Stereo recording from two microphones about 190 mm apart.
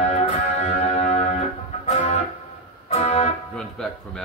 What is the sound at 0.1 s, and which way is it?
Music, 35° left (ahead or behind).